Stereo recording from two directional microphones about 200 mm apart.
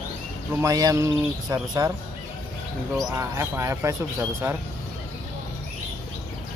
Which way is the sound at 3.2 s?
15° right (ahead or behind).